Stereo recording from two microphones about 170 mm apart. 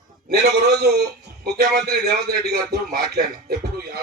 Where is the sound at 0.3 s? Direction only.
70° right (ahead or behind).